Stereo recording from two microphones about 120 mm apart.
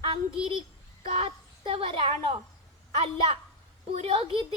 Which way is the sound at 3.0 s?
45° right (ahead or behind).